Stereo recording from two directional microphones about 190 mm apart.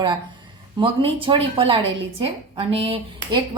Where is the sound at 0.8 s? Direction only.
25° right (ahead or behind).